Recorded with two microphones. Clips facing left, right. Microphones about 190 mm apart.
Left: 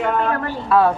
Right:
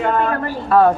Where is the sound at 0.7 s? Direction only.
40° right (ahead or behind).